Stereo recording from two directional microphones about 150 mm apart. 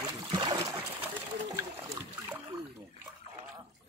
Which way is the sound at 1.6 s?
20° right (ahead or behind).